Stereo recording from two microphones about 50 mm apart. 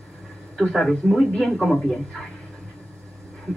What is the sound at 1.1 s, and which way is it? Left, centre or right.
Speech, centre.